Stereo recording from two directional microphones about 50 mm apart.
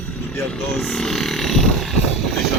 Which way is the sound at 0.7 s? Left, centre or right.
Centre.